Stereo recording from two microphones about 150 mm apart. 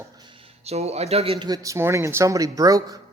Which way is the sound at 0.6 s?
45° right (ahead or behind).